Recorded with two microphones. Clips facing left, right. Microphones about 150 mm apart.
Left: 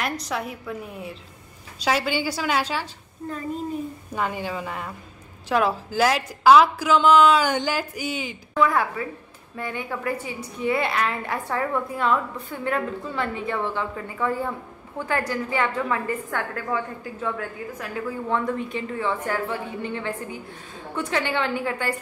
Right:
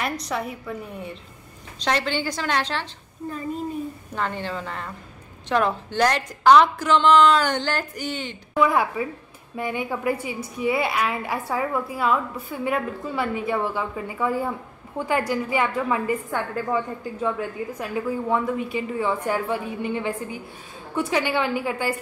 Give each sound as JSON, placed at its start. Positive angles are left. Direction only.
{"t": 0.0, "sound": "a woman's voice", "side_deg": 0}
{"t": 4.1, "sound": "a woman's voice", "side_deg": 10}
{"t": 8.5, "sound": "a woman's voice", "side_deg": -15}